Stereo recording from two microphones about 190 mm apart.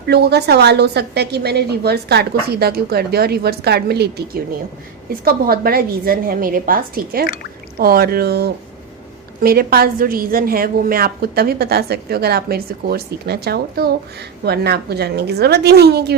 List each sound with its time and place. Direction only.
0.1 s a woman's voice: 60° right (ahead or behind)
5.2 s a woman's voice: 50° right (ahead or behind)